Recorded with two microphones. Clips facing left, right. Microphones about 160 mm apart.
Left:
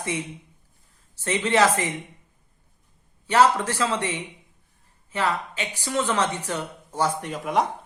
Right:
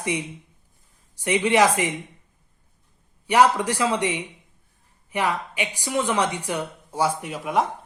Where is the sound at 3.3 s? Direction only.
15° right (ahead or behind).